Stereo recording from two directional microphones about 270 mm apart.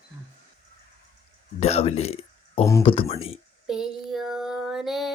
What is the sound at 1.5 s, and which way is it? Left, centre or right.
Speech, left.